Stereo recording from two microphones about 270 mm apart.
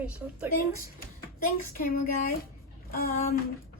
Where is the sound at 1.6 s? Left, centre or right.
Left.